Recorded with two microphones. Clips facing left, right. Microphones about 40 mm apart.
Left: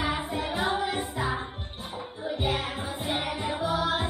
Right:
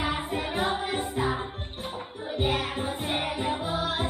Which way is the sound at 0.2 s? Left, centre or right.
Right.